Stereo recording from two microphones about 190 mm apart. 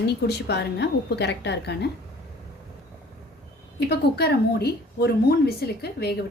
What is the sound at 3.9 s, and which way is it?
A woman's voice, 55° left (ahead or behind).